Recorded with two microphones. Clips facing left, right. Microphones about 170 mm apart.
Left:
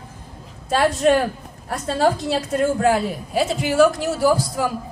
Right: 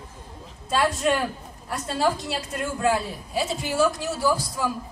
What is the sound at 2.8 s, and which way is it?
A man's voice, 65° left (ahead or behind).